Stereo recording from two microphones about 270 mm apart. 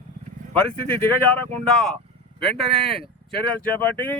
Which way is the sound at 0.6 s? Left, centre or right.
Centre.